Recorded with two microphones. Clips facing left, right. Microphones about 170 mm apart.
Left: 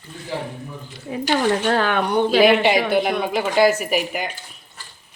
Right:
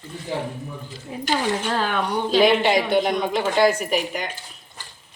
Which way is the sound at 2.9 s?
5° left (ahead or behind).